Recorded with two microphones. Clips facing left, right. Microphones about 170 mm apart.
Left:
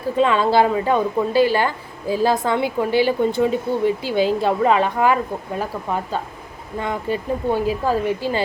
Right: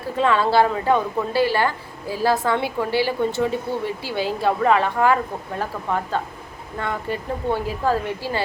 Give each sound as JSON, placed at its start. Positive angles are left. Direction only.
{"t": 0.2, "sound": "a woman's voice", "side_deg": 15}